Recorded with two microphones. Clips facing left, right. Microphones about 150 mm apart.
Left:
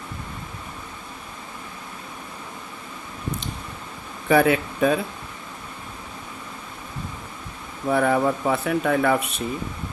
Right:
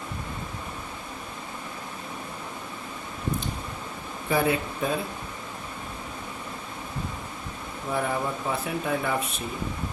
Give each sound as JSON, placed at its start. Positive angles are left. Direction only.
{"t": 4.3, "sound": "speech", "side_deg": 85}
{"t": 7.9, "sound": "speech", "side_deg": 80}